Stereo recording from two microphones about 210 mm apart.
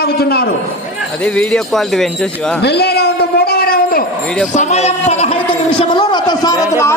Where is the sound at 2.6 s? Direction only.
50° left (ahead or behind).